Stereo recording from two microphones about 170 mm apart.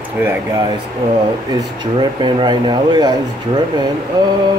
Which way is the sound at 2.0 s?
25° right (ahead or behind).